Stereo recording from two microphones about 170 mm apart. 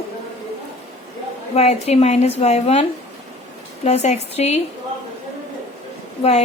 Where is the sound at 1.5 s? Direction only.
40° left (ahead or behind).